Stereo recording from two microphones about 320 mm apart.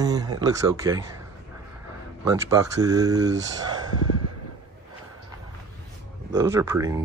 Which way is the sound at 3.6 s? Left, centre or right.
Centre.